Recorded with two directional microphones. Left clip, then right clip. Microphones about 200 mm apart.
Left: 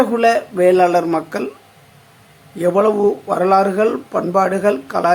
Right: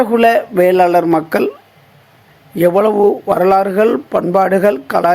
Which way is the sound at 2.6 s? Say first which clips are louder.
Right 4 dB; 30° right (ahead or behind).